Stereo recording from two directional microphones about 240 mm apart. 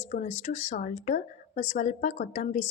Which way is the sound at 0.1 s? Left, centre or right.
Left.